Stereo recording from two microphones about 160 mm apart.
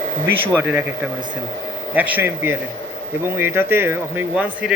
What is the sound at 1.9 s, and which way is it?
Speech, 10° right (ahead or behind).